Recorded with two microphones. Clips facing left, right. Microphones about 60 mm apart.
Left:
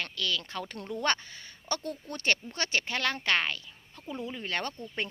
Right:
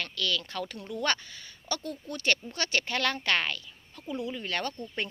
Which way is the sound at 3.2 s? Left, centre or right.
Left.